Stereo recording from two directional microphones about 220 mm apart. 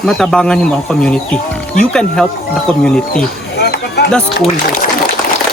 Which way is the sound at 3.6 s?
45° left (ahead or behind).